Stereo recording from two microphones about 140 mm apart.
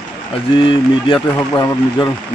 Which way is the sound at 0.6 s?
35° left (ahead or behind).